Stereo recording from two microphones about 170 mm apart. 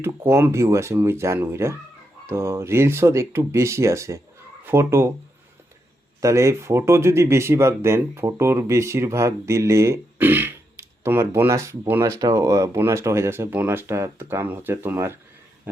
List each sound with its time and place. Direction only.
0.0 s speech: 15° right (ahead or behind)
6.1 s speech: 20° right (ahead or behind)